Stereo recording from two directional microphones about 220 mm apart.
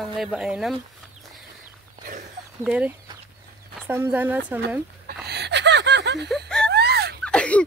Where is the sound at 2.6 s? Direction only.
5° right (ahead or behind).